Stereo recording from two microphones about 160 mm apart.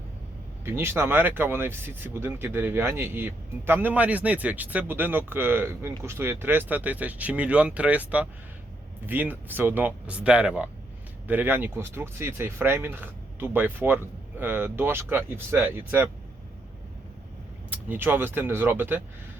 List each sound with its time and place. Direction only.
0.6 s speech: 15° right (ahead or behind)
17.7 s speech: 10° right (ahead or behind)